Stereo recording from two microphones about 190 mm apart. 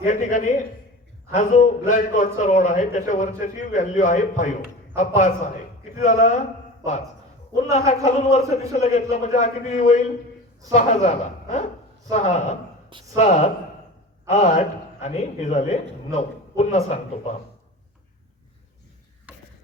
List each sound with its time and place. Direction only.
0.0 s a man's voice: 40° left (ahead or behind)
7.5 s a man's voice: 35° left (ahead or behind)